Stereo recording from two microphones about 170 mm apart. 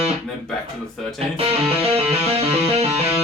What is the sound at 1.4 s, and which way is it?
Music, 35° right (ahead or behind).